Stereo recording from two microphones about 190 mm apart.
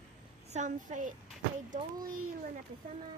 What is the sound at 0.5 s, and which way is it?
Speech, 40° right (ahead or behind).